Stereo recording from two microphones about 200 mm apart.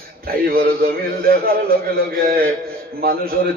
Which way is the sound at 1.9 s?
45° right (ahead or behind).